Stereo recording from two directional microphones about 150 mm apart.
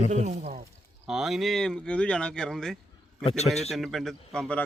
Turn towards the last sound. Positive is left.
turn(degrees=5)  # may be behind; listen again after turning